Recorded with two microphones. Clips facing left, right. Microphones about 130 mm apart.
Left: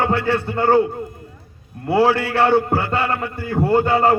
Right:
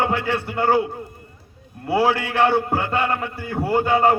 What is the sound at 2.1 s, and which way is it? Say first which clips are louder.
A man's voice: left 3 dB; 20° right (ahead or behind).